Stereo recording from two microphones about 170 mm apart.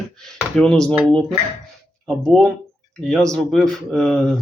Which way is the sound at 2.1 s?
5° left (ahead or behind).